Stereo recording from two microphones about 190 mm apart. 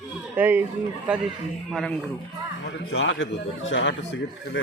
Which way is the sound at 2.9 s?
75° left (ahead or behind).